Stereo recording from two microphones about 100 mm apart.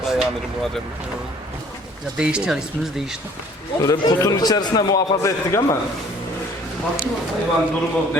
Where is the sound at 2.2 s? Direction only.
10° right (ahead or behind).